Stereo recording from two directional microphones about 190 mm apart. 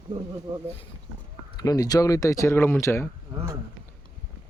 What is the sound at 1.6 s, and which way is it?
Speech, 20° left (ahead or behind).